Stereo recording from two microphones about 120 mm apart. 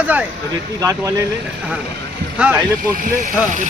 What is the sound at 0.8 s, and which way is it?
Speech, 25° right (ahead or behind).